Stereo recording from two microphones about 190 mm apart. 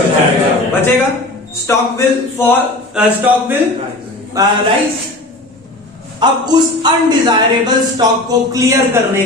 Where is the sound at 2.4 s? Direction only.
15° left (ahead or behind).